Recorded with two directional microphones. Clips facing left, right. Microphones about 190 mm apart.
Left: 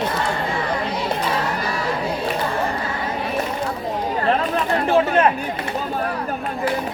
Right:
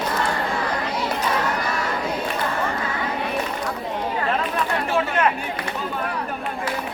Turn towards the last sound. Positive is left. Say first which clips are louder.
# left 5 dB
turn(degrees=35)  # may be behind; listen again after turning